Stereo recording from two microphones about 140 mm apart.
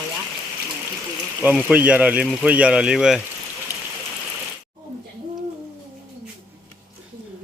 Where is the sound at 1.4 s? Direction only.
10° right (ahead or behind).